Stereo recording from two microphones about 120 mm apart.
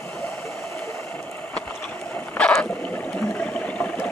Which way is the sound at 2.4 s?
10° left (ahead or behind).